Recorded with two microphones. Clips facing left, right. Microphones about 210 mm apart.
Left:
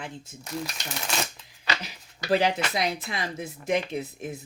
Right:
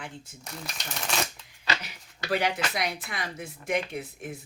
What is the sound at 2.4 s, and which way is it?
Speech, 25° left (ahead or behind).